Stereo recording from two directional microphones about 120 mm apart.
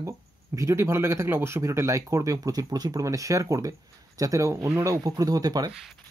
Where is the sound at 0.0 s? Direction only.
25° right (ahead or behind).